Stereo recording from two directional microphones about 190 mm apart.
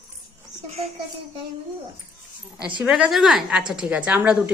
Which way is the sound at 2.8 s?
5° right (ahead or behind).